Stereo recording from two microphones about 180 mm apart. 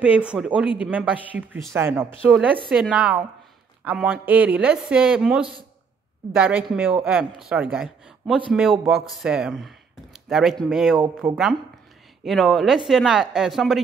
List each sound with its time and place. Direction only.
0.0 s speech: 5° right (ahead or behind)
11.2 s speech: 10° right (ahead or behind)
12.3 s speech: centre (ahead or behind)